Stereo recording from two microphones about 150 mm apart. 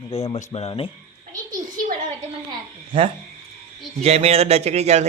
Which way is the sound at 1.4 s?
65° right (ahead or behind).